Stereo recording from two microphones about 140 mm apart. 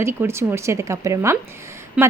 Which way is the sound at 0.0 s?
20° right (ahead or behind).